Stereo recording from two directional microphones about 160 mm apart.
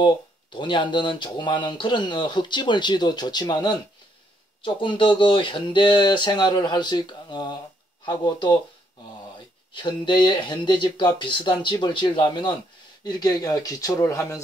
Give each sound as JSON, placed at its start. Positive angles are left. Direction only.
{"t": 0.0, "sound": "speech", "side_deg": 30}
{"t": 9.8, "sound": "speech", "side_deg": 30}